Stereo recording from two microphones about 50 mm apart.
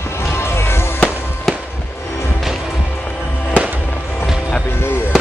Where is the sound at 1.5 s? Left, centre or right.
Centre.